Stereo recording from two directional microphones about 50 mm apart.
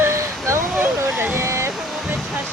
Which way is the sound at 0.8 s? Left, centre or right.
Right.